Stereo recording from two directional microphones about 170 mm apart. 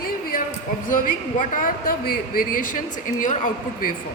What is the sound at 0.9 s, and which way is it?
A man's voice, 50° left (ahead or behind).